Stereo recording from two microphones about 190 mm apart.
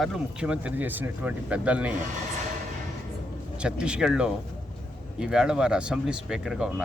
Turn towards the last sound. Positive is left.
turn(degrees=-5)  # may be behind; listen again after turning